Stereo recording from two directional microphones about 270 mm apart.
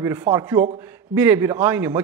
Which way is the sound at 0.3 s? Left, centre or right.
Centre.